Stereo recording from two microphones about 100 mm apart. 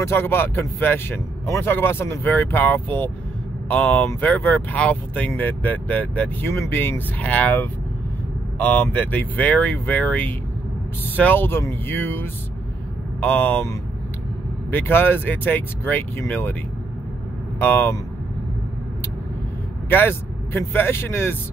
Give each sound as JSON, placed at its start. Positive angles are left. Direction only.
{"t": 0.0, "sound": "speech", "side_deg": 25}
{"t": 14.7, "sound": "speech", "side_deg": 20}
{"t": 17.6, "sound": "speech", "side_deg": 20}
{"t": 19.9, "sound": "speech", "side_deg": 20}